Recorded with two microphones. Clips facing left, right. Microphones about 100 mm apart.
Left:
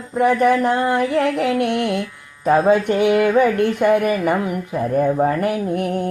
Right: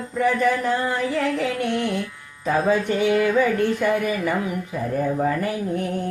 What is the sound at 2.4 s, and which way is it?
Speech, 45° left (ahead or behind).